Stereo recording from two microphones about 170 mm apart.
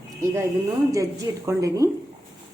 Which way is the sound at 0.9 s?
20° right (ahead or behind).